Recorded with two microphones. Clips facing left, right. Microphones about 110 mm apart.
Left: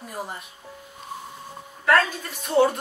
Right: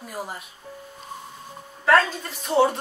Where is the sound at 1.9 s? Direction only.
30° right (ahead or behind).